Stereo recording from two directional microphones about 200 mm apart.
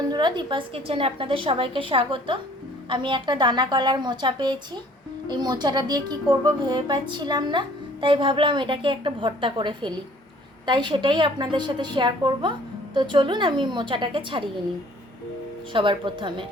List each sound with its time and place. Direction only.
0.1 s a woman's voice: 20° right (ahead or behind)
15.7 s a woman's voice: 25° right (ahead or behind)